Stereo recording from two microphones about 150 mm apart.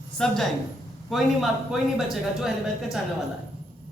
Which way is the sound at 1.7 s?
Centre (ahead or behind).